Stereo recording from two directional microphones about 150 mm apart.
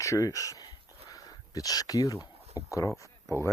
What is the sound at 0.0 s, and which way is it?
Speech, 20° left (ahead or behind).